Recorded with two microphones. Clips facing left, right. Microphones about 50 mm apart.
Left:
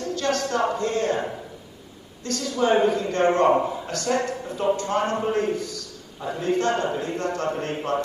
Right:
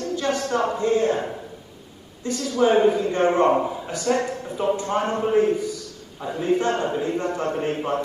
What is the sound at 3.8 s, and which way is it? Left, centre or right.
Speech, centre.